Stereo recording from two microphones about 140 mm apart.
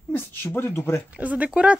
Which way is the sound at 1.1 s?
10° right (ahead or behind).